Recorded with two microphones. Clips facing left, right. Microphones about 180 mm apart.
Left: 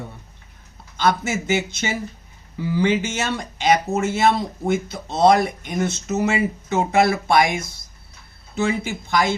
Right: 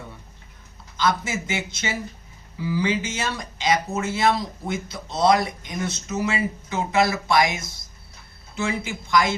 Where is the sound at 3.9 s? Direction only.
55° left (ahead or behind).